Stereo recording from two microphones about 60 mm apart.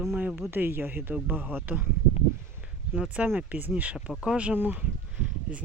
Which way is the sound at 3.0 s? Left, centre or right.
Right.